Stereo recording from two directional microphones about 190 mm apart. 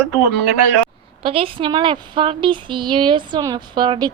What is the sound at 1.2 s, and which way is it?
Speech, 30° right (ahead or behind).